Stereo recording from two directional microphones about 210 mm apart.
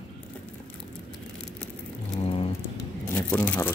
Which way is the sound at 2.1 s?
25° left (ahead or behind).